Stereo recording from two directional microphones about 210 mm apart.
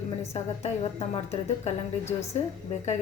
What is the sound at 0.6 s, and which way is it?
A woman's voice, 30° left (ahead or behind).